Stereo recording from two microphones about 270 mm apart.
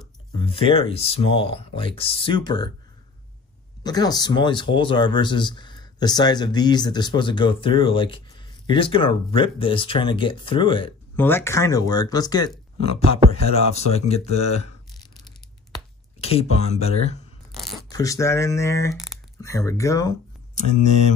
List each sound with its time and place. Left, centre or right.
0.4 s speech: centre
3.8 s speech: centre
11.1 s speech: centre; by 14.2 s left
16.2 s speech: left
17.6 s a sound: centre
17.8 s speech: centre